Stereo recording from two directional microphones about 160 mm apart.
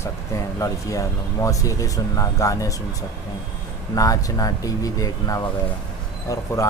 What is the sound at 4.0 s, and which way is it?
Speech, 20° left (ahead or behind).